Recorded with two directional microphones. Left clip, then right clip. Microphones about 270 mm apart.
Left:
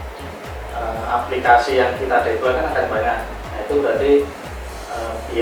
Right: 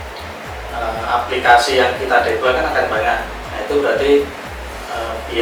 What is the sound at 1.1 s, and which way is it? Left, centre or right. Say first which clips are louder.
A man's voice: right 2 dB; centre.